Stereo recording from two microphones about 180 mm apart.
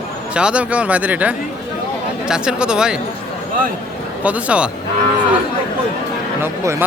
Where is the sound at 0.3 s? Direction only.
5° right (ahead or behind).